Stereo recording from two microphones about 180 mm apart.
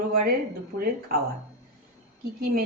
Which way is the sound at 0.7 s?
70° right (ahead or behind).